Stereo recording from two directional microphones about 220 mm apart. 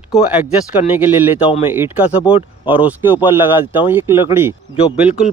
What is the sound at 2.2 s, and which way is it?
Speech, 25° left (ahead or behind).